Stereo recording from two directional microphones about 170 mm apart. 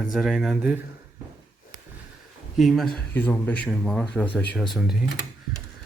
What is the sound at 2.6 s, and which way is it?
Speech, centre (ahead or behind).